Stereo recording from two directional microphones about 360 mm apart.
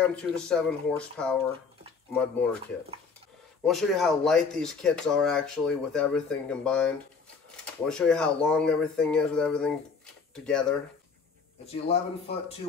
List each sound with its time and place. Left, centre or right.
0.1 s speech: centre
3.6 s speech: centre
11.6 s speech: centre